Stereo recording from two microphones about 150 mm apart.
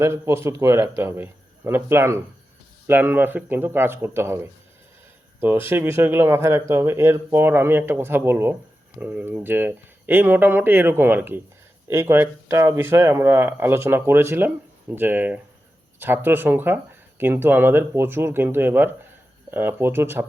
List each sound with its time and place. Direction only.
0.0 s speech: 15° right (ahead or behind)